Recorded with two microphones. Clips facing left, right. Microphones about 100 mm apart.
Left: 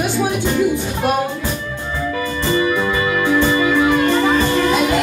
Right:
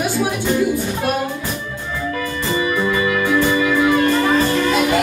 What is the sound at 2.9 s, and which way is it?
Music, 25° left (ahead or behind).